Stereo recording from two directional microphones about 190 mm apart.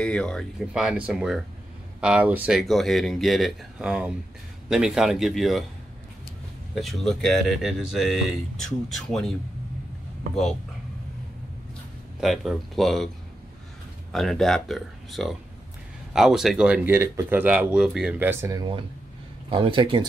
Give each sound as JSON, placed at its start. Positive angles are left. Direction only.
{"t": 0.0, "sound": "speech", "side_deg": 5}
{"t": 6.7, "sound": "speech", "side_deg": 0}
{"t": 12.2, "sound": "speech", "side_deg": 0}
{"t": 14.1, "sound": "speech", "side_deg": 0}